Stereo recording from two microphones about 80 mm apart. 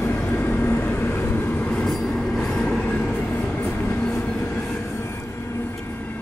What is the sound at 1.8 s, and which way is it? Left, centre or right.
Train, centre.